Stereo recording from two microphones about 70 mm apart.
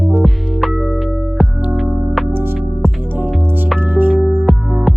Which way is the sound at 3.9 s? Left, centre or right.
Right.